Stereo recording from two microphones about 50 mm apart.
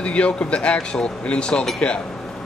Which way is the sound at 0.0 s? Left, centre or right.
Left.